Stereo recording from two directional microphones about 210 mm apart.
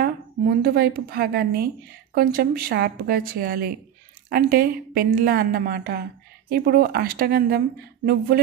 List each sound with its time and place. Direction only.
0.6 s a woman's voice: 45° right (ahead or behind)